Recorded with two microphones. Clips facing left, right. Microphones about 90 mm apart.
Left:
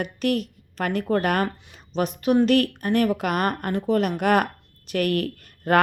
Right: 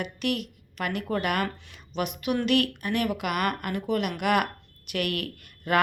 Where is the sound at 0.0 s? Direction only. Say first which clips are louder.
Left 5 dB; 40° left (ahead or behind).